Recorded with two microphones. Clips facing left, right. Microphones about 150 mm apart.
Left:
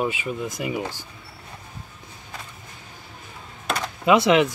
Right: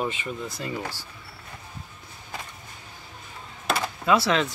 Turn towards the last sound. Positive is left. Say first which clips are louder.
# left 5 dB
turn(degrees=15)  # may be behind; listen again after turning